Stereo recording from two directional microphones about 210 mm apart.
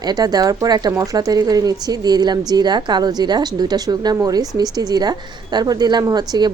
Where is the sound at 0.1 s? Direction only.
20° right (ahead or behind).